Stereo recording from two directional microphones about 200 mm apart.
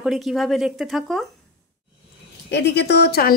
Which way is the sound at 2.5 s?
55° left (ahead or behind).